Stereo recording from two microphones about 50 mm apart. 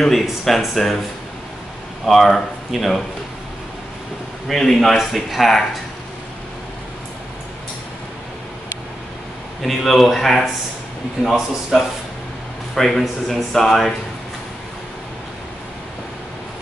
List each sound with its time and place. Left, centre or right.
0.0 s speech: centre
2.0 s speech: centre
4.5 s speech: centre
9.6 s speech: centre
11.7 s speech: centre